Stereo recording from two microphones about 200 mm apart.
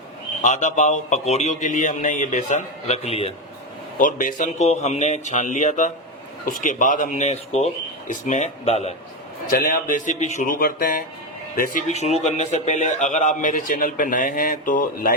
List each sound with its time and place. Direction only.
0.4 s a man's voice: 40° left (ahead or behind)
3.9 s a man's voice: 40° left (ahead or behind)
9.5 s a man's voice: 45° left (ahead or behind)